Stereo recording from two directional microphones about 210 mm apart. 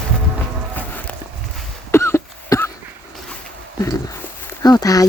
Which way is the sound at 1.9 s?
15° left (ahead or behind).